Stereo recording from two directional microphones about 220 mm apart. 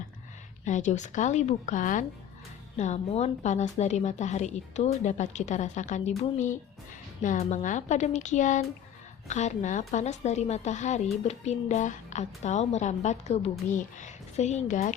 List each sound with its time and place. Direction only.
0.6 s a woman's voice: 35° left (ahead or behind)